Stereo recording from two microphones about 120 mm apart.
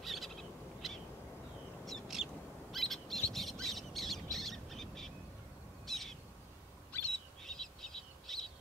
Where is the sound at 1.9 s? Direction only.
Centre (ahead or behind).